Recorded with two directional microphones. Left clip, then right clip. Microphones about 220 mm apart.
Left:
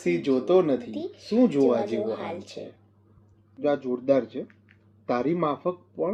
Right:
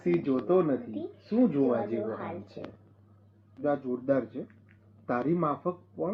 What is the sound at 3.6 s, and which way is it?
Speech, 20° left (ahead or behind).